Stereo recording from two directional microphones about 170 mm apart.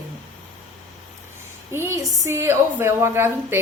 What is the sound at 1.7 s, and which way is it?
A woman's voice, 15° right (ahead or behind).